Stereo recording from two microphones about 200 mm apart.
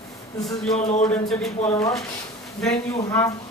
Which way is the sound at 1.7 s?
15° left (ahead or behind).